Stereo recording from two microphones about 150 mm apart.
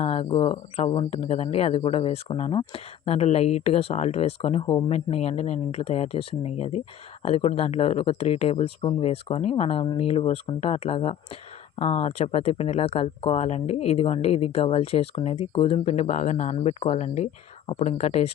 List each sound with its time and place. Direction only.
0.0 s speech: 40° left (ahead or behind)